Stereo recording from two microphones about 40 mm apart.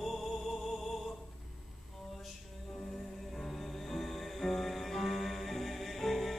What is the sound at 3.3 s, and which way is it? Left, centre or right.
Music, centre.